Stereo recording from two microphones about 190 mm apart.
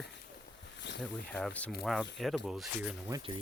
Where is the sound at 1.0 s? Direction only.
5° left (ahead or behind).